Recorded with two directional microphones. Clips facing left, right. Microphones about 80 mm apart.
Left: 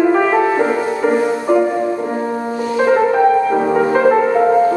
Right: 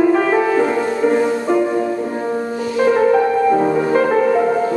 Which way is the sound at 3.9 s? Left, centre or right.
Left.